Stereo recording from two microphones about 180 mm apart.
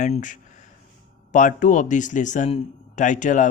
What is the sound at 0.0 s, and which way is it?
A man's voice, 45° left (ahead or behind).